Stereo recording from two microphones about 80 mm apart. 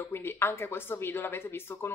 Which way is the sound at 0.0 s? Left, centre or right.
Left.